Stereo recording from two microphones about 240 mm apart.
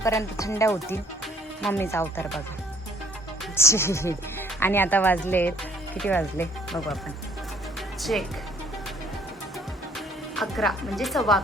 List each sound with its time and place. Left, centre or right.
0.0 s speech: centre
3.5 s speech: centre
10.3 s speech: centre